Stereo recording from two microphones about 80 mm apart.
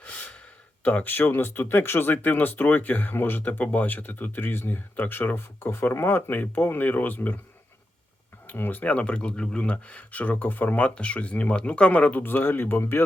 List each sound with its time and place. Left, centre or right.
0.0 s gasp: centre
0.9 s speech: left
8.4 s speech: left